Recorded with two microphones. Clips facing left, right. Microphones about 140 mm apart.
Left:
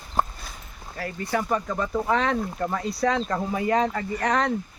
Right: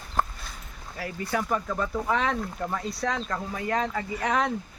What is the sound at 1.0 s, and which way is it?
Speech, 5° right (ahead or behind).